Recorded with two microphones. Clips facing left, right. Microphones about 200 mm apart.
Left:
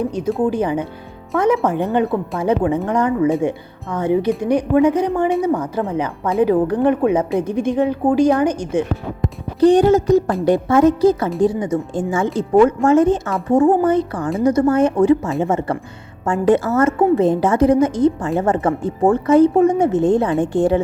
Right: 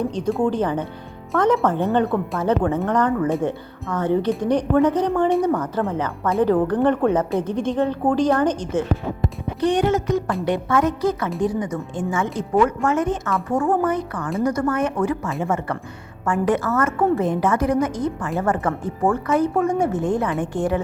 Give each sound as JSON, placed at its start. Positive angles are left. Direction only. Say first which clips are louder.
{"t": 0.0, "sound": "a woman's voice", "louder": "left 2 dB", "side_deg": 10}
{"t": 9.6, "sound": "a woman's voice", "louder": "left 8 dB", "side_deg": 35}